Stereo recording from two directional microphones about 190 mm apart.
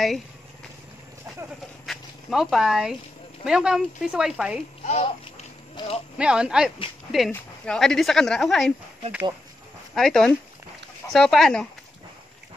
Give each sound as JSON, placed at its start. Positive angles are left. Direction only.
{"t": 1.9, "sound": "dog", "side_deg": 0}
{"t": 3.4, "sound": "speech", "side_deg": -5}
{"t": 4.8, "sound": "a sound", "side_deg": 30}
{"t": 6.1, "sound": "speech", "side_deg": -5}
{"t": 9.9, "sound": "speech", "side_deg": 5}